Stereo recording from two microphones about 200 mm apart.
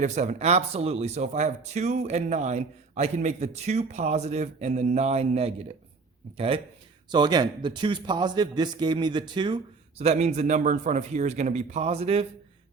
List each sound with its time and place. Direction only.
0.0 s a man's voice: 35° right (ahead or behind)
10.0 s speech: 35° right (ahead or behind)